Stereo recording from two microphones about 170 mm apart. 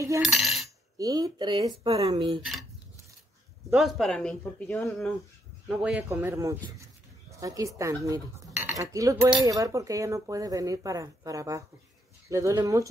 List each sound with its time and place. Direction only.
0.2 s cutlery: centre (ahead or behind)
0.9 s speech: 20° right (ahead or behind)
3.7 s speech: centre (ahead or behind)
6.0 s speech: 15° right (ahead or behind)